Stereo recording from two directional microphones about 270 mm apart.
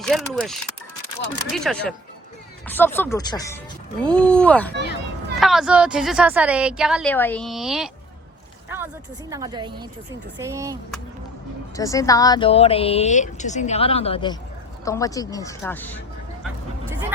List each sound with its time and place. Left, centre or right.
0.0 s a woman's voice: centre
8.7 s a sound: centre
9.3 s a woman's voice: centre
11.8 s speech: centre